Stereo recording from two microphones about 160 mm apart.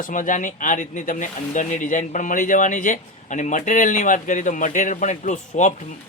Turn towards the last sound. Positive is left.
turn(degrees=50)  # may be behind; listen again after turning